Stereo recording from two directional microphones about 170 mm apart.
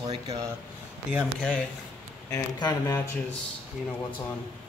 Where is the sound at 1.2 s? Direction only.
5° left (ahead or behind).